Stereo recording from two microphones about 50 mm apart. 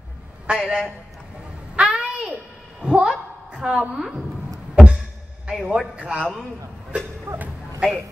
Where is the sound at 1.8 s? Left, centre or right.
Right.